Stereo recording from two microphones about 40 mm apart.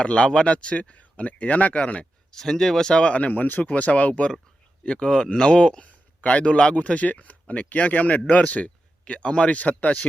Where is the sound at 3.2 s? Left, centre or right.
Left.